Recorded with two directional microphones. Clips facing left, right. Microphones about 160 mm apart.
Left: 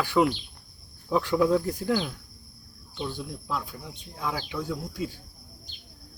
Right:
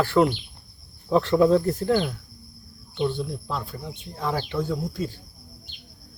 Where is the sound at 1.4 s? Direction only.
20° right (ahead or behind).